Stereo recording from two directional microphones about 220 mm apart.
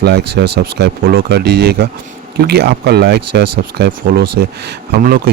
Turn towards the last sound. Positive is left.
turn(degrees=-45)  # may be behind; listen again after turning